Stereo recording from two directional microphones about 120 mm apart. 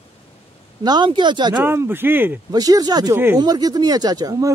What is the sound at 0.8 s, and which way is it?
Speech, 40° right (ahead or behind).